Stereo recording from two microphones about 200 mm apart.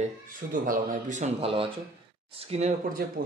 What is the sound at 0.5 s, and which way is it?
Speech, 45° right (ahead or behind).